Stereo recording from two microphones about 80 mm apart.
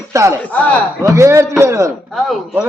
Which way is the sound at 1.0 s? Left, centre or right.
Right.